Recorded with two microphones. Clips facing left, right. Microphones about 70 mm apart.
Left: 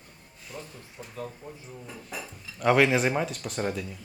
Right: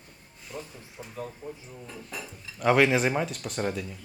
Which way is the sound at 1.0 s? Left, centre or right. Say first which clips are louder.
Right 1 dB; centre.